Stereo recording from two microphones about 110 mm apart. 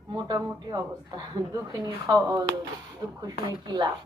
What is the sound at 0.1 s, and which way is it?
A woman's voice, 40° right (ahead or behind).